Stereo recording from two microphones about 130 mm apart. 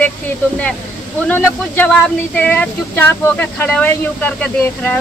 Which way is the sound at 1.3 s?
15° left (ahead or behind).